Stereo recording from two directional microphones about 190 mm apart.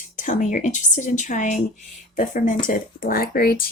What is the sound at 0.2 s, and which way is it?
A woman's voice, 45° left (ahead or behind).